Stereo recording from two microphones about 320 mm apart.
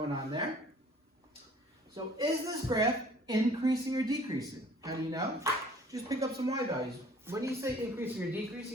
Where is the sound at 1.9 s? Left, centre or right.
Centre.